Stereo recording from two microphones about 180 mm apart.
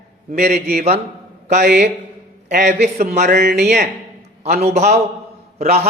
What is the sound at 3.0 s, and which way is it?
Speech, 40° right (ahead or behind).